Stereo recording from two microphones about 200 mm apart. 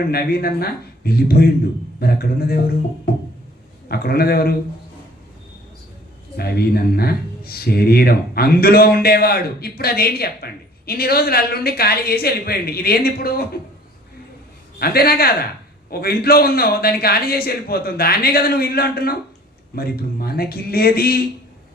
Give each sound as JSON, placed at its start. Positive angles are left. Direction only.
{"t": 0.1, "sound": "speech", "side_deg": 50}
{"t": 3.8, "sound": "speech", "side_deg": 50}
{"t": 6.3, "sound": "speech", "side_deg": 50}
{"t": 14.8, "sound": "speech", "side_deg": 50}